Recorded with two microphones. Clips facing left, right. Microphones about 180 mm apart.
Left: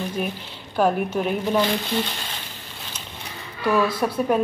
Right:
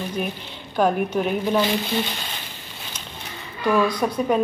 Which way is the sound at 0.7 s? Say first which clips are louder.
Right 1 dB; 5° left (ahead or behind).